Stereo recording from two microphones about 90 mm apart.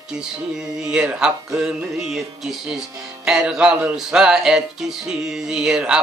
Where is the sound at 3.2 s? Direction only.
5° right (ahead or behind).